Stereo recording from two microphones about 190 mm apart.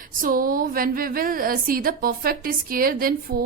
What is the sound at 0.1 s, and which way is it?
A woman's voice, 45° right (ahead or behind).